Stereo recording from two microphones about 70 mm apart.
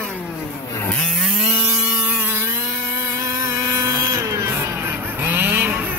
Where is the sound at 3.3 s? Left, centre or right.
Right.